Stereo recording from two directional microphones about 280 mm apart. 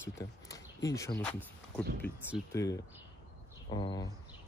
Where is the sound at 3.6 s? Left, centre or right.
Centre.